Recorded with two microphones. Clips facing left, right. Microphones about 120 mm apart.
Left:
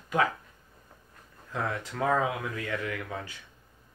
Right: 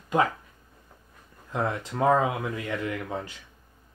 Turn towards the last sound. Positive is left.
turn(degrees=-25)  # may be behind; listen again after turning